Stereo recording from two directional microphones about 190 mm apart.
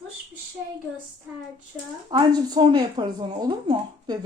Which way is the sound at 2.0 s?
25° right (ahead or behind).